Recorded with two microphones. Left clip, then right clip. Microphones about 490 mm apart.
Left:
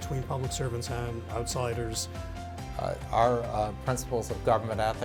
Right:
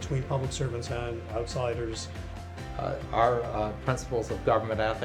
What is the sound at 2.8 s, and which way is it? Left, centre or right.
Speech, left.